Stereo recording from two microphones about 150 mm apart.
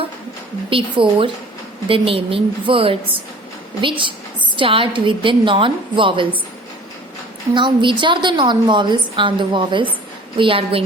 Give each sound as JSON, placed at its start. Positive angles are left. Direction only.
{"t": 0.7, "sound": "a woman's voice", "side_deg": -35}
{"t": 7.5, "sound": "a woman's voice", "side_deg": -30}